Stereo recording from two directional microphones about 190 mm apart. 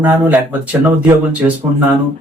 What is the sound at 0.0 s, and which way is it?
Speech, 10° right (ahead or behind).